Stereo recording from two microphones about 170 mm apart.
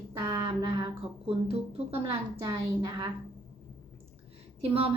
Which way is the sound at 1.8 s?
30° right (ahead or behind).